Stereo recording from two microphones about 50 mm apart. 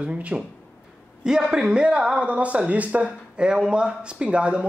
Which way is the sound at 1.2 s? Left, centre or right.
Centre.